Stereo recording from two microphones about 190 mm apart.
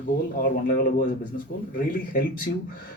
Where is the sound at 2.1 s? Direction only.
45° left (ahead or behind).